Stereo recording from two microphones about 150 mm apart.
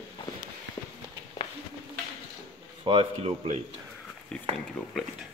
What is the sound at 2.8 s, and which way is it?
Speech, 35° right (ahead or behind).